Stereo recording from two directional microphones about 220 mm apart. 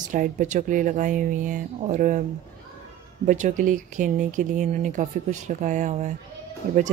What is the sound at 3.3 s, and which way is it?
Speech, 35° right (ahead or behind).